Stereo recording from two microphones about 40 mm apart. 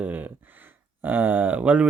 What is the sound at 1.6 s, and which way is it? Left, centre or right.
Speech, right.